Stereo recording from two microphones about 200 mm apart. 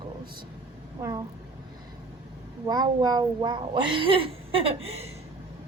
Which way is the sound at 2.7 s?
20° right (ahead or behind).